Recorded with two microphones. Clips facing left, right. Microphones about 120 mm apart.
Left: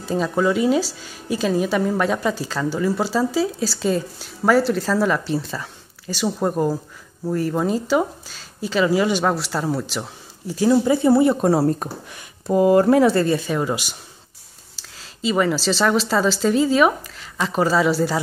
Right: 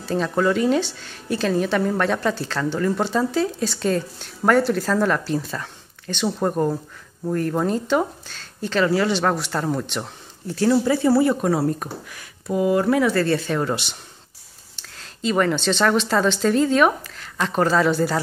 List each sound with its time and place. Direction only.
0.3 s a woman's voice: 5° left (ahead or behind); by 11.5 s 25° left (ahead or behind)
11.5 s speech: 35° left (ahead or behind)
13.2 s a woman's voice: 10° left (ahead or behind)